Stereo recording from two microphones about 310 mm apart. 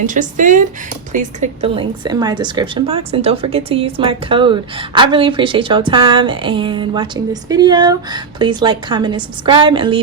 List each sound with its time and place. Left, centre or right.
0.0 s a woman's voice: right